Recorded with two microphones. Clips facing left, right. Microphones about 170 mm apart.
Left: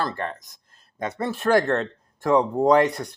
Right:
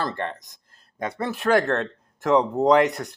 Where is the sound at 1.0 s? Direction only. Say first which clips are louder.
Even; 25° left (ahead or behind).